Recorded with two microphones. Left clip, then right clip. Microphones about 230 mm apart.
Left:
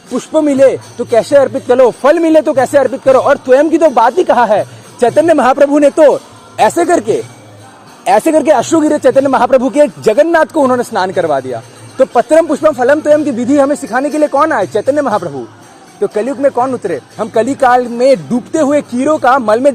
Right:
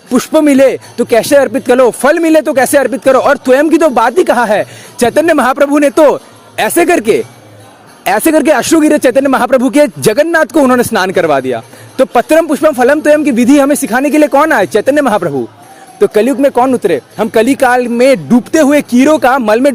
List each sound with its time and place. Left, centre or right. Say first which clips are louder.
0.1 s speech: right 4 dB; right
8.0 s speech: even; right